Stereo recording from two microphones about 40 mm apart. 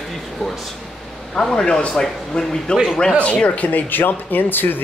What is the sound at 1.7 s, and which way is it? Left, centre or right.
Speech, left.